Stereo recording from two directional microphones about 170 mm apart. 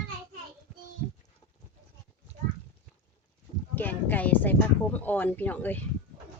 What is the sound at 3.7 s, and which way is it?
Speech, 10° left (ahead or behind).